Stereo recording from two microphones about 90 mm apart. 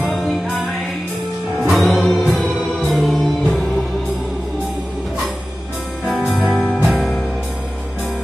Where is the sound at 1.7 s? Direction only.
Centre (ahead or behind).